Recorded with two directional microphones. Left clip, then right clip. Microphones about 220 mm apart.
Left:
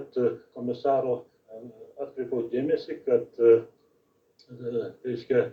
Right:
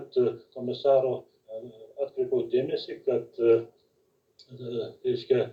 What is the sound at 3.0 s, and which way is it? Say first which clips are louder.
Speech: left 3 dB; 35° right (ahead or behind).